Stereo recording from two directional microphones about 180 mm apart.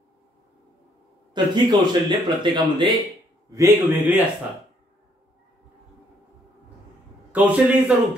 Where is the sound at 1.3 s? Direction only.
25° right (ahead or behind).